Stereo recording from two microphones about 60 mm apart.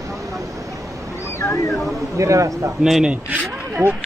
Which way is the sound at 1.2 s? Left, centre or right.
Left.